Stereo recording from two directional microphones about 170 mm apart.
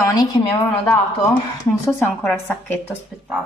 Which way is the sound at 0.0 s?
20° left (ahead or behind).